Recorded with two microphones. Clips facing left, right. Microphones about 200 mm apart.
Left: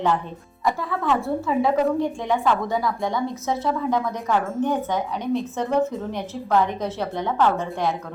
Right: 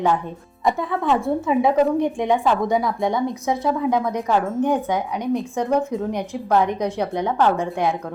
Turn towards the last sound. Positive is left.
turn(degrees=-15)  # may be behind; listen again after turning